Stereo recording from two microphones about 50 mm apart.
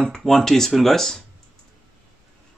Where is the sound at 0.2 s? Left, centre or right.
Centre.